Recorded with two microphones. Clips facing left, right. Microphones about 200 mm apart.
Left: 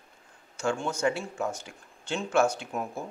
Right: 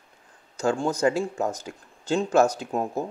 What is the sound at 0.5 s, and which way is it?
Speech, 35° right (ahead or behind).